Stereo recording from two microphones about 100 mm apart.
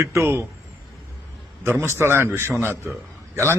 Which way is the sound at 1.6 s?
25° right (ahead or behind).